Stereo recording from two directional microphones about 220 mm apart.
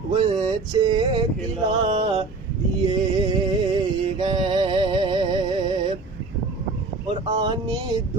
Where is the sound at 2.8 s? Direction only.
20° right (ahead or behind).